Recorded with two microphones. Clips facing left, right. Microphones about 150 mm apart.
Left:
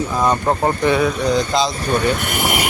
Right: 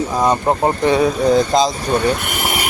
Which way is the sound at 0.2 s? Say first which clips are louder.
Right 2 dB; 15° right (ahead or behind).